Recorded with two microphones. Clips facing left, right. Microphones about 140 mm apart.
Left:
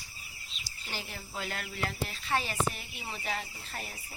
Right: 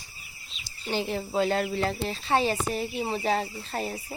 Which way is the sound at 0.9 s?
25° right (ahead or behind).